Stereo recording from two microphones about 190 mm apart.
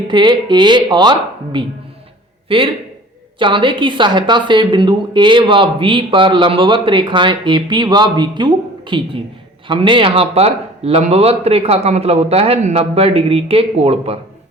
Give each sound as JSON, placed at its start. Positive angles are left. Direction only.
{"t": 0.1, "sound": "a woman's voice", "side_deg": -25}